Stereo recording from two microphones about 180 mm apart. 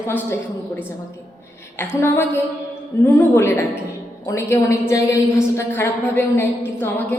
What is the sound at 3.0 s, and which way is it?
A woman's voice, 15° left (ahead or behind).